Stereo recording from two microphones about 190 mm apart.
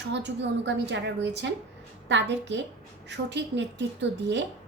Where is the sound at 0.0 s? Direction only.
65° right (ahead or behind).